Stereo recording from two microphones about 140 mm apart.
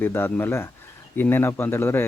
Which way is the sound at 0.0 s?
15° left (ahead or behind).